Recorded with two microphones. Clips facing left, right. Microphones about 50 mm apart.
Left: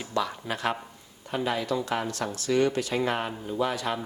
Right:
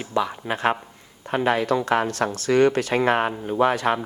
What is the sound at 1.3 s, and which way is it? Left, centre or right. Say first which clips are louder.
Speech: right 7 dB; right.